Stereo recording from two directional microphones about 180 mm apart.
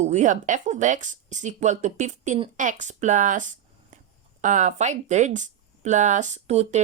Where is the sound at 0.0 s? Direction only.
40° right (ahead or behind).